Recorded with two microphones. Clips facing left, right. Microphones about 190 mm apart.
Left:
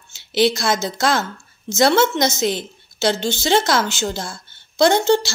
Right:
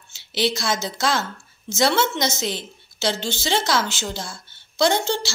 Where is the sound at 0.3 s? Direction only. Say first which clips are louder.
Left 6 dB; 50° left (ahead or behind).